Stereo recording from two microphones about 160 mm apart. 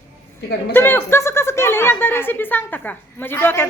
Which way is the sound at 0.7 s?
15° left (ahead or behind).